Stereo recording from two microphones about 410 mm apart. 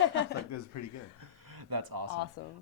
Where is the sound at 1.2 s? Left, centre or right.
Right.